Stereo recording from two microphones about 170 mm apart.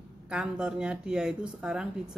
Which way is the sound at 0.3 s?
5° right (ahead or behind).